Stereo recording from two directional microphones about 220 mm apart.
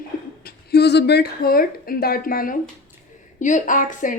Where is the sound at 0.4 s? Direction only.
45° left (ahead or behind).